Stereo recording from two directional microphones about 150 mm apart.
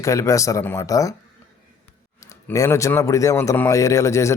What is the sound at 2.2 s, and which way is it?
A man's voice, 20° left (ahead or behind).